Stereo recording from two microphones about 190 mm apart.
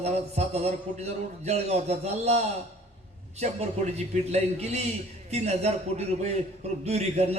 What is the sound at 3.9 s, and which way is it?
Speech, 35° right (ahead or behind).